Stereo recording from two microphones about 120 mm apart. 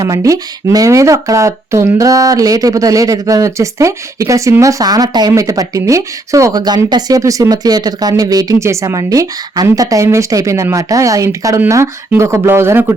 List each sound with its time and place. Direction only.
0.0 s speech: 25° right (ahead or behind)